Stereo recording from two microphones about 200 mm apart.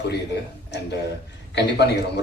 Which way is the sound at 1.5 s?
60° left (ahead or behind).